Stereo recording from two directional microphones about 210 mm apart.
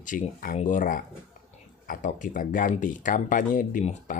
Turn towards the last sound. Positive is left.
turn(degrees=35)  # may be behind; listen again after turning